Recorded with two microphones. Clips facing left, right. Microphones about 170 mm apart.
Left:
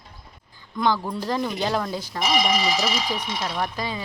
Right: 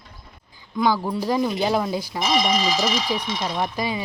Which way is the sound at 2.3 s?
5° left (ahead or behind).